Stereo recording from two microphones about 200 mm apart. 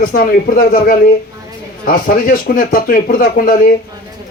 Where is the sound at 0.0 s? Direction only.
45° left (ahead or behind).